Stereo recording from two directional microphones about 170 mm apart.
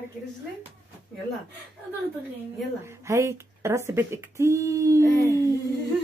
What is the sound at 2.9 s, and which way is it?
Speech, 15° right (ahead or behind).